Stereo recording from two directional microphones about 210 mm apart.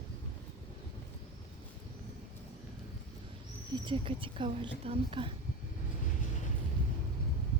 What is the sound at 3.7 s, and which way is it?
Speech, 20° right (ahead or behind).